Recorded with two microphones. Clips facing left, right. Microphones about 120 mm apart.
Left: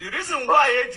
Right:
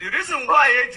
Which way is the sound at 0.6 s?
70° right (ahead or behind).